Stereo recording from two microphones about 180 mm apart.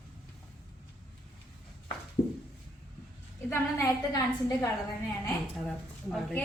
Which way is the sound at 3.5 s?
15° left (ahead or behind).